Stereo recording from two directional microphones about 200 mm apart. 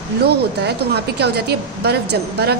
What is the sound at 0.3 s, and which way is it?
A woman's voice, 55° right (ahead or behind).